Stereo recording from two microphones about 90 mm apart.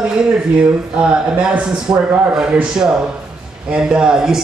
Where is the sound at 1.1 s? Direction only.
10° right (ahead or behind).